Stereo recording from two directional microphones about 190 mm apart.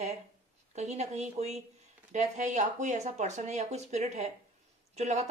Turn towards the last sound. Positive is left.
turn(degrees=-35)  # may be behind; listen again after turning